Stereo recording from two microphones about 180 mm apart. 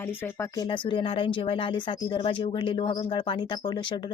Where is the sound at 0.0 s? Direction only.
10° left (ahead or behind).